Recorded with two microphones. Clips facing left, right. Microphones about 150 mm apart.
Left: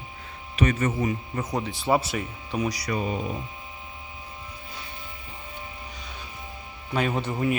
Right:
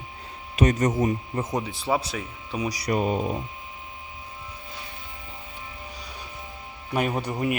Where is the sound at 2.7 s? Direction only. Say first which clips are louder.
Right 3 dB; 45° right (ahead or behind).